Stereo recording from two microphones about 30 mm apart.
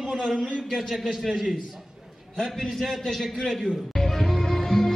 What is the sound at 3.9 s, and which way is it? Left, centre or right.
Music, centre.